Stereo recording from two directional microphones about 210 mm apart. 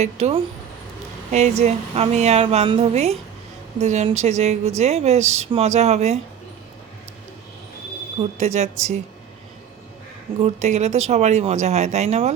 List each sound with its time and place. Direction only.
0.0 s speech: 30° right (ahead or behind)
8.4 s speech: 30° right (ahead or behind)
10.4 s speech: 30° right (ahead or behind)